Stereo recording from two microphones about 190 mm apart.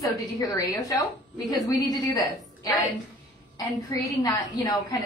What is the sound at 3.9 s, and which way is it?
Speech, 20° left (ahead or behind).